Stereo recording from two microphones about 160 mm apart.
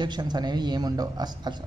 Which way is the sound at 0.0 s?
25° right (ahead or behind).